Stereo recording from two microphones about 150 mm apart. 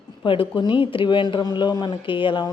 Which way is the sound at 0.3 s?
35° left (ahead or behind).